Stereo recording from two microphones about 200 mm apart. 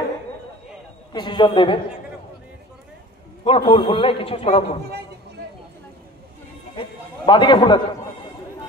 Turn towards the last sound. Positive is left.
turn(degrees=20)  # may be behind; listen again after turning